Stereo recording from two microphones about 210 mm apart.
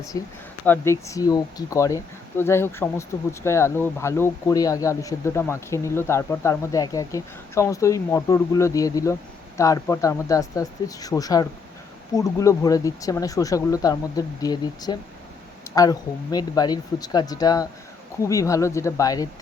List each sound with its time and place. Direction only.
0.1 s speech: 15° left (ahead or behind)